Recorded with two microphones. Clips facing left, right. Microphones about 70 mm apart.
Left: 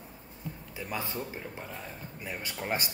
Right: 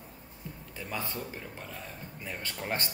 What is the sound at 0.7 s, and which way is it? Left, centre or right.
A man's voice, centre.